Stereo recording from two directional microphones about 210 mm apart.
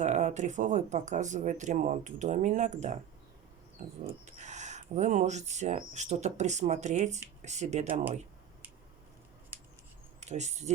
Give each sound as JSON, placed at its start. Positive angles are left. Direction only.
{"t": 0.0, "sound": "speech", "side_deg": -35}
{"t": 9.5, "sound": "scissors", "side_deg": -10}
{"t": 10.2, "sound": "speech", "side_deg": -35}